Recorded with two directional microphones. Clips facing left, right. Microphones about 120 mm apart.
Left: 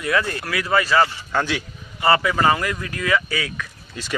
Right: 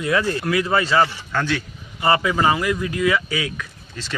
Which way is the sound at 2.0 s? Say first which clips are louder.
Even; 20° right (ahead or behind).